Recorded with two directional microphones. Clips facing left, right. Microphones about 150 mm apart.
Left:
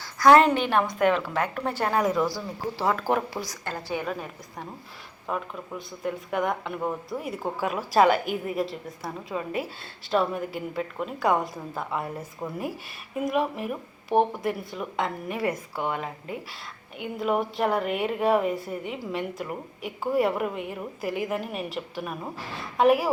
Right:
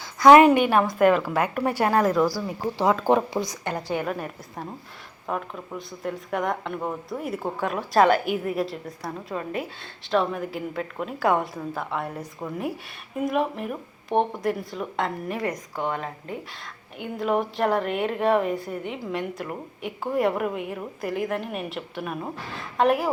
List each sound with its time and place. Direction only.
0.2 s a woman's voice: 15° right (ahead or behind); by 2.3 s centre (ahead or behind)
2.7 s speech: 20° right (ahead or behind)
3.9 s a woman's voice: 5° right (ahead or behind)